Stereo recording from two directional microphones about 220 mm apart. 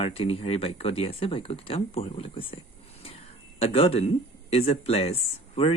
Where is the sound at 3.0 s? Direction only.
25° left (ahead or behind).